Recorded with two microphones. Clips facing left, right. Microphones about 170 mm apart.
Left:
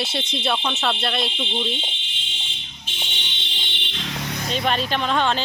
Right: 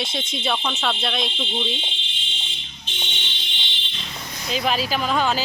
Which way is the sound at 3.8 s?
85° left.